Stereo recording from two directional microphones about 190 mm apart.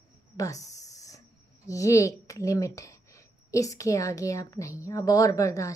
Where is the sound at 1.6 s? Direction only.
15° left (ahead or behind).